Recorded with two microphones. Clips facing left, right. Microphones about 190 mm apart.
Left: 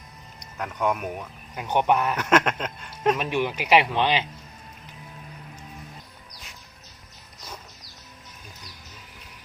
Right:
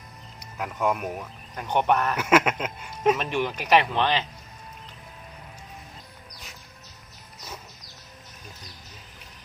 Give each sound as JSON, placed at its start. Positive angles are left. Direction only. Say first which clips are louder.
{"t": 0.3, "sound": "speech", "louder": "even", "side_deg": -5}
{"t": 1.5, "sound": "speech", "louder": "left 1 dB", "side_deg": 10}
{"t": 2.1, "sound": "a sound", "louder": "right 1 dB", "side_deg": -5}
{"t": 3.2, "sound": "speech", "louder": "left 2 dB", "side_deg": 10}